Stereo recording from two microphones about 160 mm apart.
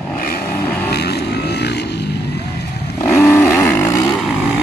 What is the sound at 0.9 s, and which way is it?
Vehicle, 90° left.